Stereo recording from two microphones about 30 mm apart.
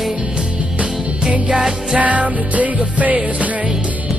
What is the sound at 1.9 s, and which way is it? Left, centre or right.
Music, right.